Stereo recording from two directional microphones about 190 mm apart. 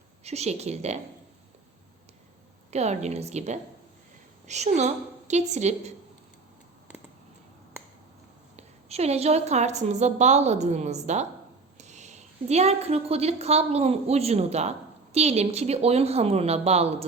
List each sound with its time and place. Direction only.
0.3 s a woman's voice: 35° right (ahead or behind)
2.6 s a woman's voice: 35° right (ahead or behind)
8.5 s a woman's voice: 35° right (ahead or behind)